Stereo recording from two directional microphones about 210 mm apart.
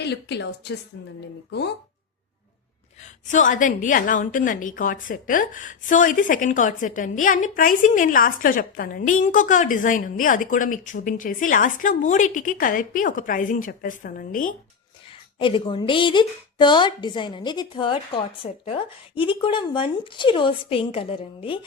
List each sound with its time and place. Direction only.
0.0 s a woman's voice: 55° left (ahead or behind)
3.0 s a woman's voice: 35° left (ahead or behind)
15.4 s a woman's voice: 25° left (ahead or behind)